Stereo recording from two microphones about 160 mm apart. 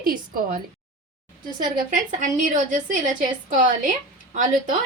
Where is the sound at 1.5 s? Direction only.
55° right (ahead or behind).